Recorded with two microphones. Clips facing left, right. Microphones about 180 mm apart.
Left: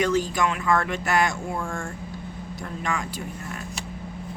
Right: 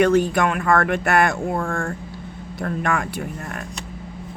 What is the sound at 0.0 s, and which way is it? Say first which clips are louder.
Speech: right 6 dB; 60° right (ahead or behind).